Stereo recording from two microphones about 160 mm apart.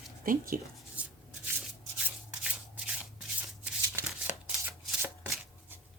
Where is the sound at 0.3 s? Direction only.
60° right (ahead or behind).